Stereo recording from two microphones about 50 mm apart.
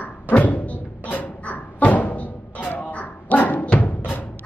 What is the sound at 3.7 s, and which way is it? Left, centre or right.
Music, left.